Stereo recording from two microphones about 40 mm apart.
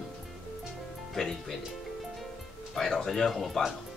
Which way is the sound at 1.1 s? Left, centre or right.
Centre.